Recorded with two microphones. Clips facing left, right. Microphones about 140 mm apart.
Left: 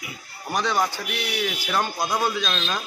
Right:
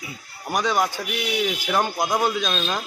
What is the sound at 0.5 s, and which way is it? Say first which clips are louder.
Speech: right 2 dB; 15° right (ahead or behind).